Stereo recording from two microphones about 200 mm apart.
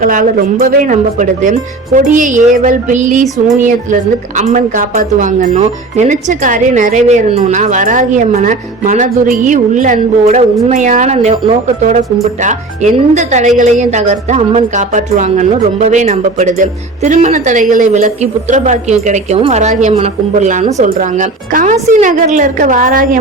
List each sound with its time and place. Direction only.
0.0 s speech: 45° right (ahead or behind)
4.4 s speech: 40° right (ahead or behind)